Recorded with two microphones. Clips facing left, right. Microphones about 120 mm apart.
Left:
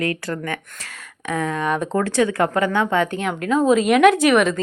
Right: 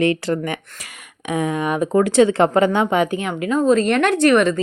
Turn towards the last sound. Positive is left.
turn(degrees=0)  # may be behind; listen again after turning